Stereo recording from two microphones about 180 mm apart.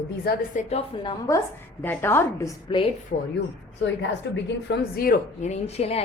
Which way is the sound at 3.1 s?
60° left (ahead or behind).